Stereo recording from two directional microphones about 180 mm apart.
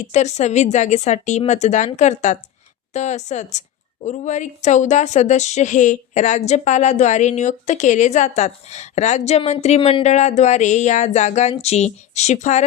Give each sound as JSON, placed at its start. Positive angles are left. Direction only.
{"t": 0.1, "sound": "a woman's voice", "side_deg": 40}